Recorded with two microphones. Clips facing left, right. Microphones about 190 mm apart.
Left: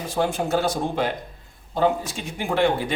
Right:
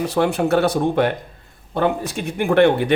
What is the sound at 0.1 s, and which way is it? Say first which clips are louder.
Speech: right 3 dB; 65° right (ahead or behind).